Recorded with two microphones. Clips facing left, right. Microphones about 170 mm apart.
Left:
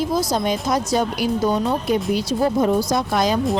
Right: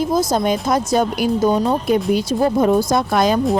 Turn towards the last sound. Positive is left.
turn(degrees=-55)  # may be behind; listen again after turning